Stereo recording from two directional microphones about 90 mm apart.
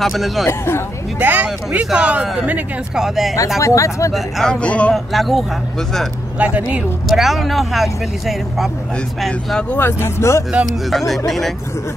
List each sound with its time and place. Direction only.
0.0 s speech: centre (ahead or behind)
0.5 s speech: 30° left (ahead or behind)
1.2 s speech: 15° right (ahead or behind)
3.0 s speech: 5° right (ahead or behind)
3.5 s speech: 35° left (ahead or behind)
4.1 s speech: centre (ahead or behind)
4.6 s a man's voice: 15° left (ahead or behind)
4.9 s speech: centre (ahead or behind)
6.3 s speech: 15° right (ahead or behind)
7.1 s speech: 5° right (ahead or behind)
9.7 s speech: 25° left (ahead or behind)
10.6 s speech: centre (ahead or behind)